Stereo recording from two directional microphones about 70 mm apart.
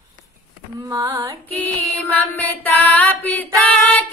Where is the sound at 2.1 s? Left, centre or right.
Left.